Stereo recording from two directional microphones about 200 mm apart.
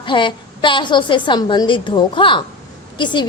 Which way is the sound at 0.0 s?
25° left (ahead or behind).